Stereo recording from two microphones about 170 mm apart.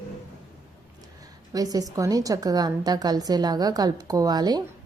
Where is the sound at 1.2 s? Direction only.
20° right (ahead or behind).